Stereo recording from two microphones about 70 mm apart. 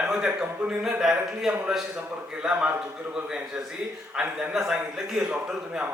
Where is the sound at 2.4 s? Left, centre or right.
Centre.